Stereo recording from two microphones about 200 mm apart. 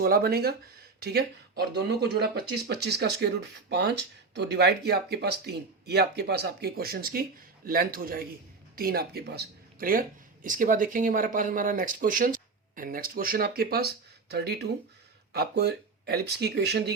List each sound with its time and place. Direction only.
0.0 s speech: 50° right (ahead or behind)